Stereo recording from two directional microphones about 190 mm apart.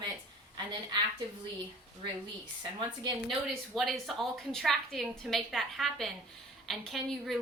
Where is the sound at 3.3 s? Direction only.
Centre (ahead or behind).